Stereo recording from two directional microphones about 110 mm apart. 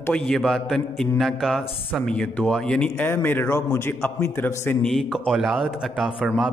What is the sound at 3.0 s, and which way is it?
A man's voice, 20° left (ahead or behind).